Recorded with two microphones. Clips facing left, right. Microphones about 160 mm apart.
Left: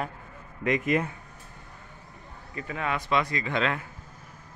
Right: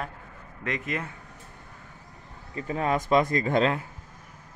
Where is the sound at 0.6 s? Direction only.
15° left (ahead or behind).